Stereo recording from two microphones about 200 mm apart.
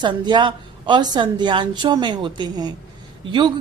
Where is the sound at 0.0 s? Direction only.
25° right (ahead or behind).